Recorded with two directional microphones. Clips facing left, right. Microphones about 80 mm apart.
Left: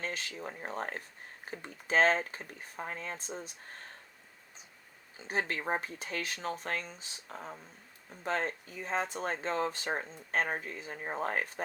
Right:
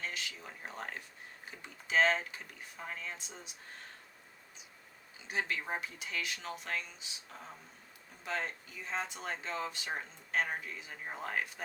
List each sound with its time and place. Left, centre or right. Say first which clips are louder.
0.0 s speech: left 4 dB; left
5.1 s speech: left 3 dB; left